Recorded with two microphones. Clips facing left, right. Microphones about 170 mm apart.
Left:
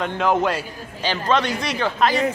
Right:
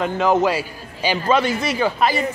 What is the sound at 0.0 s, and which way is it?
A man's voice, 5° right (ahead or behind).